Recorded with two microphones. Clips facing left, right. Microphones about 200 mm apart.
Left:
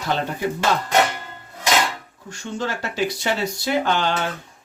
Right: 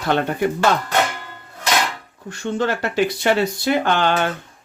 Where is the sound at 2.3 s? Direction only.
60° right (ahead or behind).